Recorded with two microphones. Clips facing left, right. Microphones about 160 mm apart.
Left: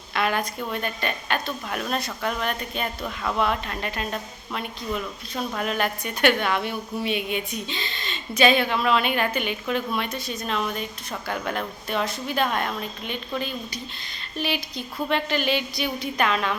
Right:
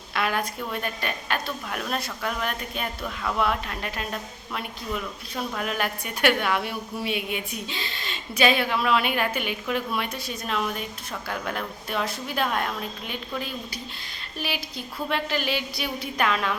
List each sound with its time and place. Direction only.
0.1 s a woman's voice: centre (ahead or behind)